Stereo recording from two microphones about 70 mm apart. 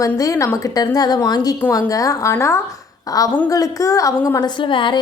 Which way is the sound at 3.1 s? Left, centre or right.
Left.